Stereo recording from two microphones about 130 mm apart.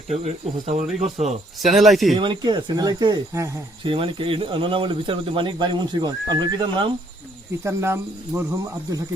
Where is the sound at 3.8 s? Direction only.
40° right (ahead or behind).